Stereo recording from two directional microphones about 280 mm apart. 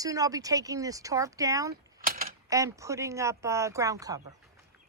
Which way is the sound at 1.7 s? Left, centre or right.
Right.